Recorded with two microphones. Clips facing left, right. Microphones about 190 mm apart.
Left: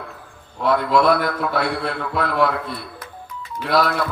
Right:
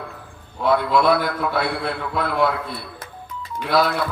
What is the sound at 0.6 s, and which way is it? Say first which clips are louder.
A man's voice: left 1 dB; 5° right (ahead or behind).